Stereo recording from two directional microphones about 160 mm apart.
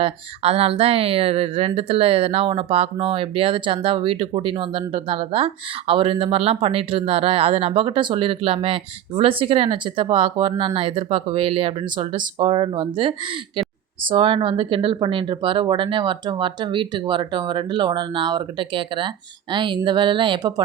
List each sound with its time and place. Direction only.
0.0 s speech: 40° right (ahead or behind)